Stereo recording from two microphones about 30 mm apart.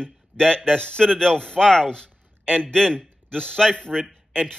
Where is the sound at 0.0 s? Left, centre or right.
Left.